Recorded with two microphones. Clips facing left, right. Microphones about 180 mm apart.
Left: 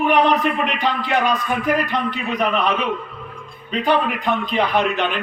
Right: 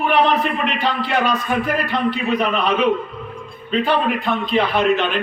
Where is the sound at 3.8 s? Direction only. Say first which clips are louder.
Left 1 dB; 15° left (ahead or behind).